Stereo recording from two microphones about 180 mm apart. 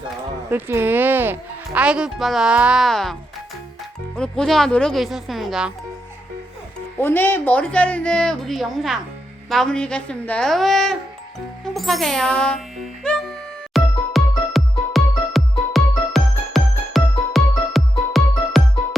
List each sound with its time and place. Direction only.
0.5 s speech: 10° right (ahead or behind)
4.2 s speech: 5° left (ahead or behind)
7.0 s a woman's voice: 10° left (ahead or behind)
11.6 s music: centre (ahead or behind)